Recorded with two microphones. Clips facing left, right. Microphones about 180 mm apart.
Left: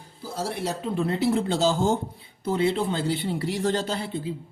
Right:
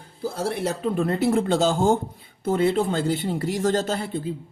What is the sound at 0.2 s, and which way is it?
Speech, 55° right (ahead or behind).